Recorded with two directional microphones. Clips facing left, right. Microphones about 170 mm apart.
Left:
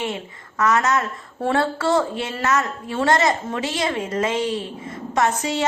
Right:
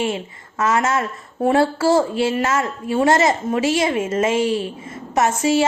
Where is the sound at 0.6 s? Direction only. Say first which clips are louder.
Right 1 dB; 25° right (ahead or behind).